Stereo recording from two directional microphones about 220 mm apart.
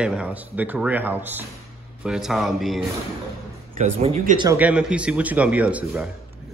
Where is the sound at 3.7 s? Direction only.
30° right (ahead or behind).